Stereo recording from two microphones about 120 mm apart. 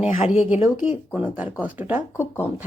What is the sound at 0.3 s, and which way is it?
Speech, 5° right (ahead or behind).